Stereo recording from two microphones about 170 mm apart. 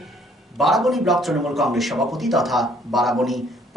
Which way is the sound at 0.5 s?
Centre (ahead or behind).